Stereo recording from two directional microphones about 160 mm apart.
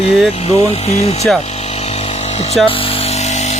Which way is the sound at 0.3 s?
40° left (ahead or behind).